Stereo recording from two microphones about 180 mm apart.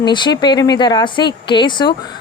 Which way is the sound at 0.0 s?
25° left (ahead or behind).